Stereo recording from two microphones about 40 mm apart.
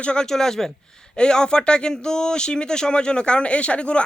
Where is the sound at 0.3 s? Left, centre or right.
Centre.